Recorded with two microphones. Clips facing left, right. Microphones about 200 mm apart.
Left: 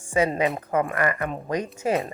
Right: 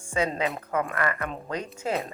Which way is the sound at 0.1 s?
10° left (ahead or behind).